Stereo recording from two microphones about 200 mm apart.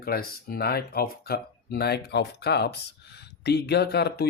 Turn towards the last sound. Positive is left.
turn(degrees=55)  # may be behind; listen again after turning